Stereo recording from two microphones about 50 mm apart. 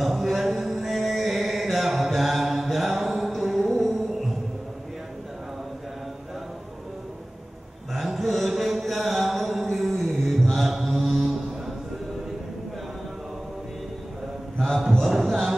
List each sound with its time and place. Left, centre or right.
0.0 s chant: centre
7.9 s mantra: centre
14.9 s a sound: centre